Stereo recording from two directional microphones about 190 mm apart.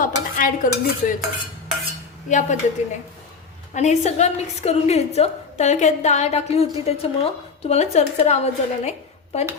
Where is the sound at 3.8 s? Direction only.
35° left (ahead or behind).